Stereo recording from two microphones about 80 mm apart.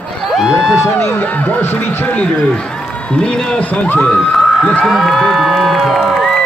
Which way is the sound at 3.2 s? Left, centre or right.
Centre.